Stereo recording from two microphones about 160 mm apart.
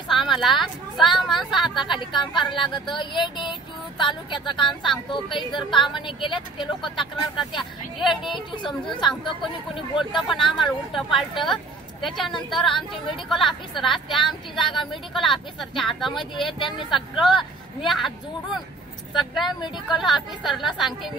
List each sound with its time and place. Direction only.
0.1 s a woman's voice: centre (ahead or behind)
1.8 s speech: 30° left (ahead or behind)
4.6 s speech: centre (ahead or behind)
5.9 s speech: 30° left (ahead or behind)
7.5 s speech: centre (ahead or behind)
9.9 s speech: centre (ahead or behind)
14.6 s speech: 30° left (ahead or behind)
14.9 s speech: centre (ahead or behind)
16.5 s speech: 30° left (ahead or behind)
17.4 s speech: centre (ahead or behind)